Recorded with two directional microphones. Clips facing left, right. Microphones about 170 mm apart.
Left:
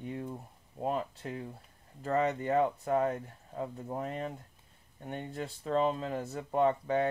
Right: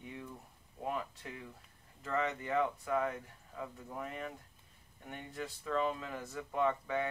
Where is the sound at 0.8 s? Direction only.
35° left (ahead or behind).